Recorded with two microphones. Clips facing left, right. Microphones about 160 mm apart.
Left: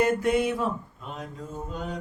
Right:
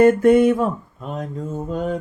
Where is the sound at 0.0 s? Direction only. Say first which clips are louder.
Right 10 dB; 50° right (ahead or behind).